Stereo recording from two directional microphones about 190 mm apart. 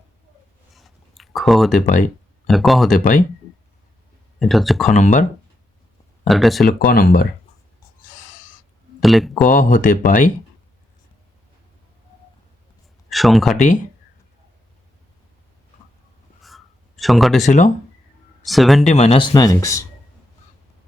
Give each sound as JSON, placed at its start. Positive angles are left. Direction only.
{"t": 0.7, "sound": "a sound", "side_deg": 0}
{"t": 2.5, "sound": "speech", "side_deg": 0}
{"t": 4.4, "sound": "speech", "side_deg": 0}
{"t": 4.9, "sound": "speech", "side_deg": 40}
{"t": 6.2, "sound": "speech", "side_deg": 0}
{"t": 6.8, "sound": "speech", "side_deg": 50}
{"t": 9.0, "sound": "speech", "side_deg": 0}
{"t": 9.5, "sound": "speech", "side_deg": 45}
{"t": 13.1, "sound": "speech", "side_deg": 0}
{"t": 16.4, "sound": "a sound", "side_deg": 0}
{"t": 17.4, "sound": "speech", "side_deg": 40}
{"t": 18.4, "sound": "speech", "side_deg": 0}
{"t": 18.9, "sound": "speech", "side_deg": 30}